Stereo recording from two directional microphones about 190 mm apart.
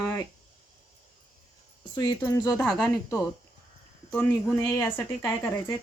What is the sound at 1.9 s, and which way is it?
Speech, 20° left (ahead or behind).